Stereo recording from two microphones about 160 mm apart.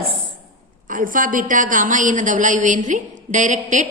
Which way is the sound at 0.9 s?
55° right (ahead or behind).